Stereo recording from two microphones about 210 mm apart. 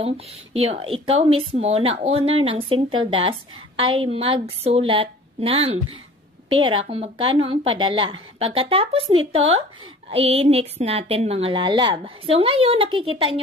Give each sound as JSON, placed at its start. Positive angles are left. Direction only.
{"t": 0.0, "sound": "a woman's voice", "side_deg": -30}